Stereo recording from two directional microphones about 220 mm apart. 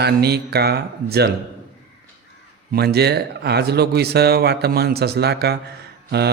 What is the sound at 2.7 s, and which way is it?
Mantra, 45° right (ahead or behind).